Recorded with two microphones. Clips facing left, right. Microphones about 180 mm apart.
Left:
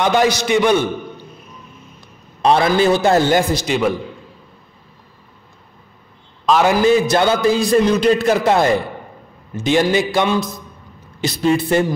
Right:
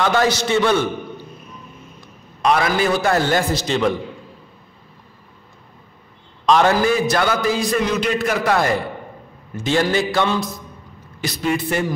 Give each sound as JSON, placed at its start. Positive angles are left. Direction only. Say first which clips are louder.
{"t": 0.0, "sound": "a man's voice", "louder": "left 2 dB", "side_deg": 15}
{"t": 2.4, "sound": "a man's voice", "louder": "left 4 dB", "side_deg": 30}
{"t": 6.4, "sound": "a man's voice", "louder": "left 1 dB", "side_deg": 5}
{"t": 6.8, "sound": "a man's voice", "louder": "left 4 dB", "side_deg": 20}
{"t": 11.1, "sound": "a man's voice", "louder": "left 5 dB", "side_deg": 30}